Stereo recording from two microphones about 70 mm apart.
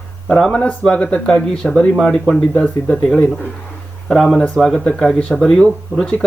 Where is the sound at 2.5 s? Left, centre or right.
Centre.